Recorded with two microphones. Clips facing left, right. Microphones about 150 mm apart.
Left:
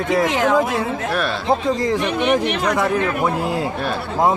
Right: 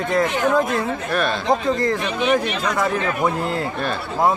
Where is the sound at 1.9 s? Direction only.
60° left (ahead or behind).